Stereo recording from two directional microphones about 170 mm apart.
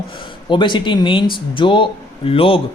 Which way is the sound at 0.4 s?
30° left (ahead or behind).